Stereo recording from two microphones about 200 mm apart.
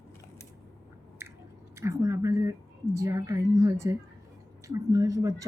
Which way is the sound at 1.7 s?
15° right (ahead or behind).